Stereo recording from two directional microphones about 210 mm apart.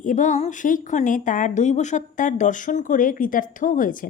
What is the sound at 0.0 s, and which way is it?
Speech, 35° left (ahead or behind).